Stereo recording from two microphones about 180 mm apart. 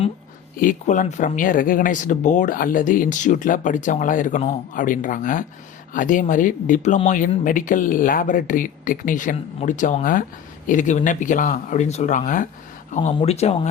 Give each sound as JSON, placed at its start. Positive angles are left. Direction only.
{"t": 0.6, "sound": "speech", "side_deg": 45}